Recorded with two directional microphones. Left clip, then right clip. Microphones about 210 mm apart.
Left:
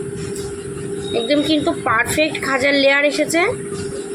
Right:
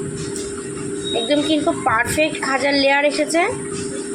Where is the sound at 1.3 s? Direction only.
15° left (ahead or behind).